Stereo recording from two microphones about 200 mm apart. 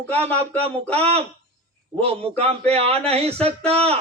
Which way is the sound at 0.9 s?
30° right (ahead or behind).